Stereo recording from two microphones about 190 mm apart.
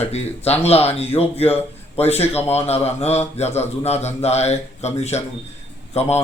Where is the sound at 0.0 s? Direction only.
35° left (ahead or behind).